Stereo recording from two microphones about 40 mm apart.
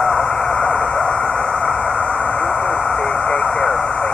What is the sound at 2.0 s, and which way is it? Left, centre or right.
Vehicle, left.